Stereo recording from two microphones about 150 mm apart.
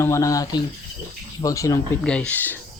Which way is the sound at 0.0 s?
20° left (ahead or behind).